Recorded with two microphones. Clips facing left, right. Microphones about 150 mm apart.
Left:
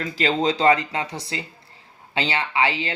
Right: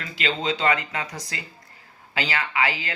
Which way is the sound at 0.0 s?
35° left (ahead or behind).